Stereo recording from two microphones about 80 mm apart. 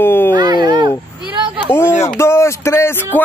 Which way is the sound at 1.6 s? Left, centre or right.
Left.